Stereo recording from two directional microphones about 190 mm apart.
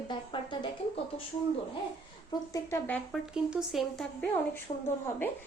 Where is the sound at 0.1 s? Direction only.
25° left (ahead or behind).